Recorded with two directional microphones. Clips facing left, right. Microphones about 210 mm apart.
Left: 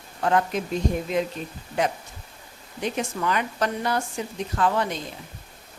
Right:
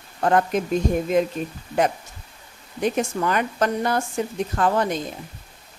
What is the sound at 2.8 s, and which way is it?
Speech, 50° right (ahead or behind).